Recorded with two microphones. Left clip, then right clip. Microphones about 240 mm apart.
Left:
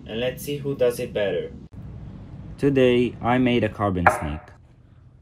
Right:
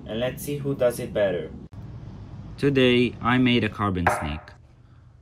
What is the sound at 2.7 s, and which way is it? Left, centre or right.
Speech, centre.